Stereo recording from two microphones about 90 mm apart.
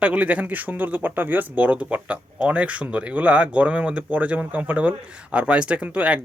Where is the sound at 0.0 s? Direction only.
15° right (ahead or behind).